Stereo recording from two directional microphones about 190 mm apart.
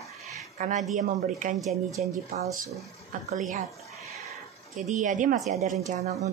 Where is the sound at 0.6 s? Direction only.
40° right (ahead or behind).